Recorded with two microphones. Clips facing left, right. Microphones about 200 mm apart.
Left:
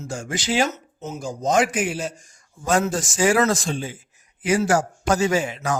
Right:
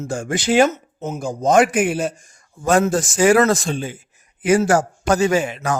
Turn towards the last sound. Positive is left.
turn(degrees=-60)  # may be behind; listen again after turning